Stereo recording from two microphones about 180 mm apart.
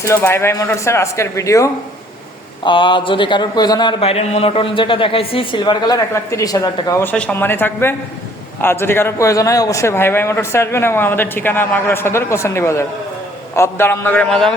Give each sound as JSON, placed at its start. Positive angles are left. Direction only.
{"t": 0.0, "sound": "speech", "side_deg": 15}
{"t": 2.6, "sound": "a man's voice", "side_deg": 25}